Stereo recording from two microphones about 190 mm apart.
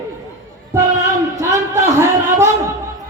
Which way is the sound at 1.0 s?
20° right (ahead or behind).